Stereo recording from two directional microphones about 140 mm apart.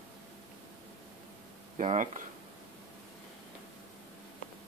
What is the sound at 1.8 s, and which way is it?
Speech, 60° right (ahead or behind).